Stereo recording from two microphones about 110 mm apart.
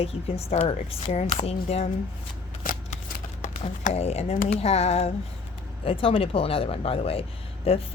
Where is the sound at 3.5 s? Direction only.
70° left (ahead or behind).